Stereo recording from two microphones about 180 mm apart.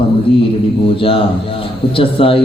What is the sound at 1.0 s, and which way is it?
A man's voice, 30° left (ahead or behind).